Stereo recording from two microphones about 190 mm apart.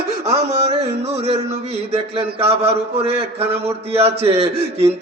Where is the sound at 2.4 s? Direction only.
30° right (ahead or behind).